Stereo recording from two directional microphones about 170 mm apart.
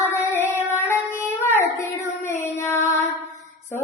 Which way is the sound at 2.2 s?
15° left (ahead or behind).